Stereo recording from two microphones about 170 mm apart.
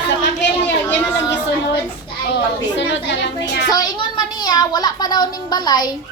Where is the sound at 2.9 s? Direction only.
90° left.